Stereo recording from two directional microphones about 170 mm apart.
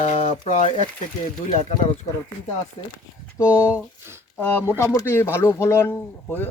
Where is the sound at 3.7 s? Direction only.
15° right (ahead or behind).